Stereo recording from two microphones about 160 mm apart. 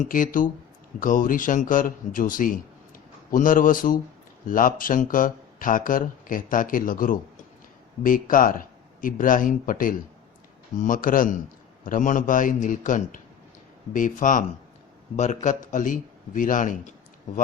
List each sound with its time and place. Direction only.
0.0 s a man's voice: 55° left (ahead or behind)